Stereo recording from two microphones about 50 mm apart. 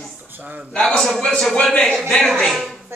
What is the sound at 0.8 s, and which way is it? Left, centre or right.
Speech, centre.